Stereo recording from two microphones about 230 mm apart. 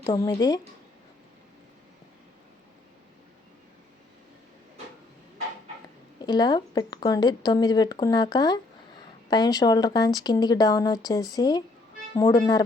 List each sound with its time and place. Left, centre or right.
0.0 s speech: centre
6.2 s speech: centre